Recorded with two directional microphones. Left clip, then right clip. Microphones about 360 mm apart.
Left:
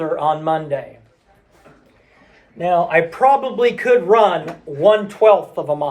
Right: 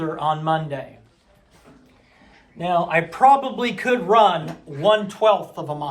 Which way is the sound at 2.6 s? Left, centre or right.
Centre.